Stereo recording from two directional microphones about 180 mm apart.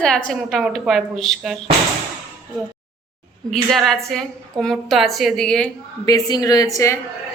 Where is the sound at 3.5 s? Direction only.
Centre (ahead or behind).